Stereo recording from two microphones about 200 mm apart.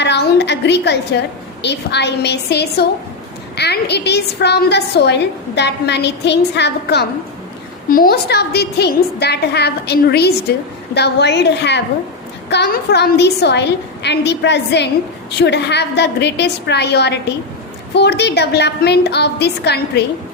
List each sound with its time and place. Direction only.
0.0 s a woman's voice: 60° left (ahead or behind)
7.9 s a woman's voice: 45° left (ahead or behind)